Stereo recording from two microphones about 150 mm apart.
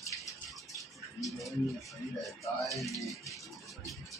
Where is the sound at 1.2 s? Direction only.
Centre (ahead or behind).